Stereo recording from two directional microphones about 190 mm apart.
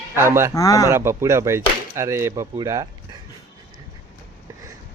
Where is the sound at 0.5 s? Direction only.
20° left (ahead or behind).